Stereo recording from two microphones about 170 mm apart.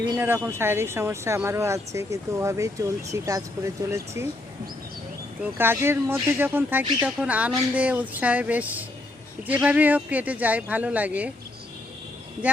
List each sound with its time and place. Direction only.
0.2 s speech: 10° right (ahead or behind)
5.5 s speech: 15° right (ahead or behind)